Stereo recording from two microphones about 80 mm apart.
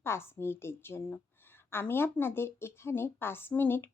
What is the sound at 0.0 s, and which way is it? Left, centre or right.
A woman's voice, left.